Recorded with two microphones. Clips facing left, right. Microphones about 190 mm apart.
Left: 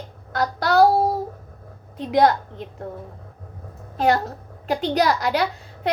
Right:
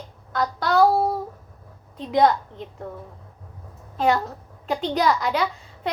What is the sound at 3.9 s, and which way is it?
A woman's voice, 70° left (ahead or behind).